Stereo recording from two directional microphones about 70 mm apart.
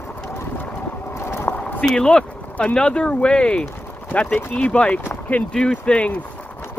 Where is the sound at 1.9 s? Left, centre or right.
Centre.